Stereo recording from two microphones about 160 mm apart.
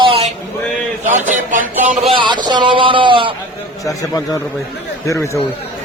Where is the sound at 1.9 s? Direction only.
35° right (ahead or behind).